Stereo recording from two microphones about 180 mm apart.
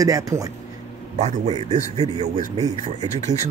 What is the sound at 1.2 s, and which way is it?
Speech, 40° right (ahead or behind).